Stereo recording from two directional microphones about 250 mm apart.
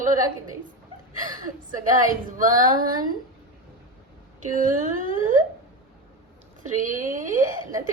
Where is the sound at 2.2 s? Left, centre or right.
Right.